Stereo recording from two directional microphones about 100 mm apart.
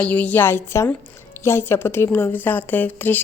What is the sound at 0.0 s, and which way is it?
A woman's voice, 15° left (ahead or behind).